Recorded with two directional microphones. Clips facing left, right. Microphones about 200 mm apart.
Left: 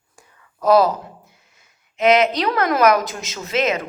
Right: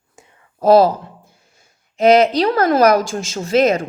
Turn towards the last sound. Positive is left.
turn(degrees=-35)  # may be behind; listen again after turning